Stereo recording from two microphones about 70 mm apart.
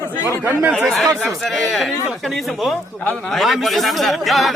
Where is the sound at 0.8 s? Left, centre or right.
Centre.